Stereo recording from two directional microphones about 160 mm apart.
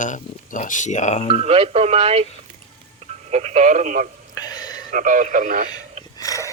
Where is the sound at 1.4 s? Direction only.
35° right (ahead or behind).